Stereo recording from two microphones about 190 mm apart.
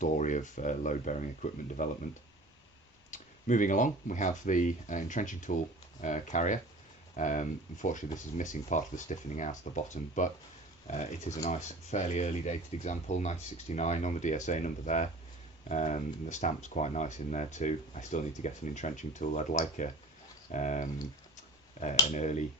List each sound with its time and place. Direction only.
0.0 s speech: 40° left (ahead or behind)
3.1 s speech: 45° left (ahead or behind)